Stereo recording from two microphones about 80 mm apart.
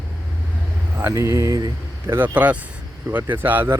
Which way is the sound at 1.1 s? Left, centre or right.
Right.